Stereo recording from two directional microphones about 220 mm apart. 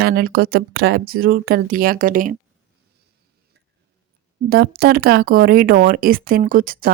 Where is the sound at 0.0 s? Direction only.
45° right (ahead or behind).